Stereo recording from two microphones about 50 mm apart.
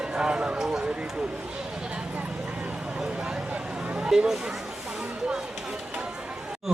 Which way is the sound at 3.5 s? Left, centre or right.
Centre.